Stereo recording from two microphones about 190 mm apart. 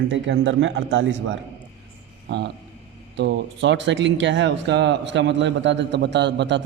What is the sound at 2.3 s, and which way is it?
Speech, 65° right (ahead or behind).